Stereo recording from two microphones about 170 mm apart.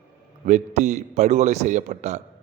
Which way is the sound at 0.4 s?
45° right (ahead or behind).